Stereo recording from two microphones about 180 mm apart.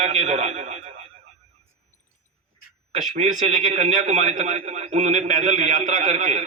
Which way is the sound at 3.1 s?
40° right (ahead or behind).